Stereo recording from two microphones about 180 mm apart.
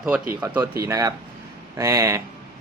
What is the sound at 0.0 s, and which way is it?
Speech, 5° right (ahead or behind).